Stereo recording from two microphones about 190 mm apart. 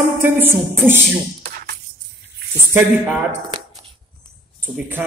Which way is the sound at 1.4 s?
50° right (ahead or behind).